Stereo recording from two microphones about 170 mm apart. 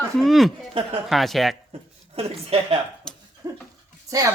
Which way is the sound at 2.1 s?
35° right (ahead or behind).